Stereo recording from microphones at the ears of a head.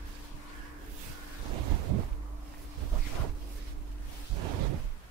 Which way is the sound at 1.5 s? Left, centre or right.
Right.